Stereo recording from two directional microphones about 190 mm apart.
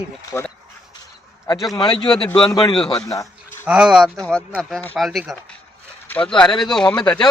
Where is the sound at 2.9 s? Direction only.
15° left (ahead or behind).